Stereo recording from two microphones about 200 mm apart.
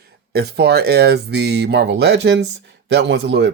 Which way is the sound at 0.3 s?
55° right (ahead or behind).